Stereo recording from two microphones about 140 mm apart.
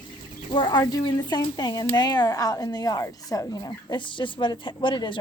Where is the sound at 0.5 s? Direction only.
30° left (ahead or behind).